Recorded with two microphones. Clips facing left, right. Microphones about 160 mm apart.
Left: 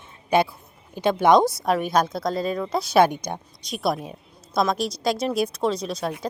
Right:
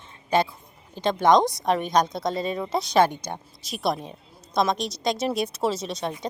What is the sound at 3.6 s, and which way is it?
A woman's voice, centre (ahead or behind).